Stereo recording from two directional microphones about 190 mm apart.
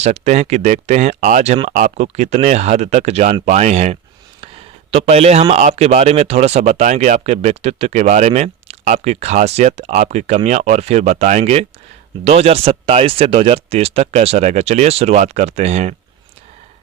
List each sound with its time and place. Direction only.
0.0 s speech: 40° right (ahead or behind)